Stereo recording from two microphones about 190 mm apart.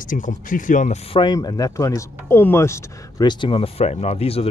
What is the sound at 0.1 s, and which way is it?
Speech, 45° left (ahead or behind).